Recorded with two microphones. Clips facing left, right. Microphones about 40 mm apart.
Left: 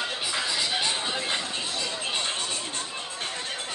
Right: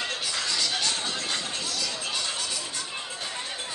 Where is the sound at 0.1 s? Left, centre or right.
Left.